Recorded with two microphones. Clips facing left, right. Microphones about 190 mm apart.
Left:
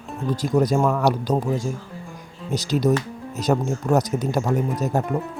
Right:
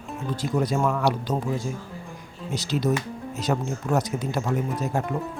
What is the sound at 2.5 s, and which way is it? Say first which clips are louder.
Speech: left 4 dB; 40° left (ahead or behind).